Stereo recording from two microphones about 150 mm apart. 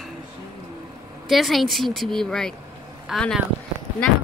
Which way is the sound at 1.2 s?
Centre (ahead or behind).